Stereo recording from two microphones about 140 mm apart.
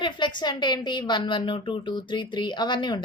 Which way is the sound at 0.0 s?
35° left (ahead or behind).